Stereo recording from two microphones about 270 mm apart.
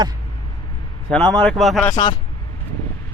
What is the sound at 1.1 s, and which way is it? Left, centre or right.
Speech, centre.